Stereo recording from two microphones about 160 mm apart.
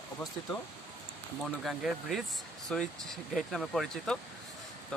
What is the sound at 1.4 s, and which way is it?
Speech, centre (ahead or behind).